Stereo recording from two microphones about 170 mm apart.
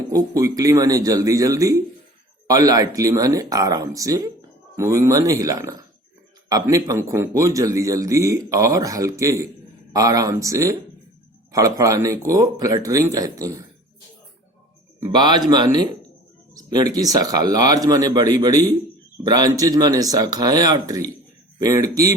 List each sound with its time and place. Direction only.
0.1 s a man's voice: 20° right (ahead or behind)
15.1 s a man's voice: 25° right (ahead or behind)